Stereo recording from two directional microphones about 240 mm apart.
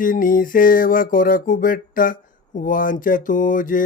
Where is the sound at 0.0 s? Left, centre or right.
Left.